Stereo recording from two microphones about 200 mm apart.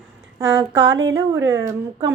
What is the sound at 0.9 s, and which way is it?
Speech, 65° right (ahead or behind).